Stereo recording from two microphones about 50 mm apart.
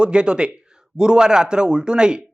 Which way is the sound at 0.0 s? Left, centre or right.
Centre.